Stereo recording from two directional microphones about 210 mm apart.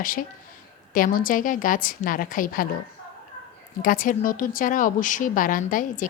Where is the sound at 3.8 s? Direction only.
40° left (ahead or behind).